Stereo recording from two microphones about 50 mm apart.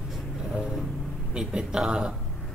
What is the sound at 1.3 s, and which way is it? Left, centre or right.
Speech, centre.